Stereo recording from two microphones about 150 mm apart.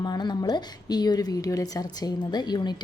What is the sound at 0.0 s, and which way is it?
A woman's voice, 30° left (ahead or behind).